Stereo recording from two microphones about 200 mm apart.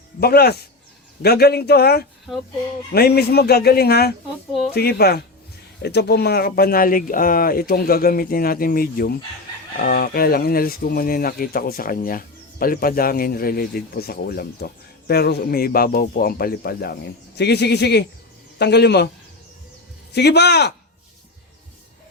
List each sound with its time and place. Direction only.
0.2 s speech: 50° left (ahead or behind)
20.1 s speech: 55° left (ahead or behind)